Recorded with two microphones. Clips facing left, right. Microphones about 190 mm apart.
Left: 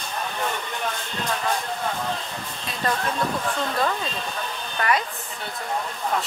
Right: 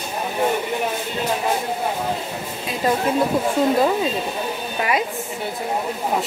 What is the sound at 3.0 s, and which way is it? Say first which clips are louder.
Speech: right 7 dB; 20° right (ahead or behind).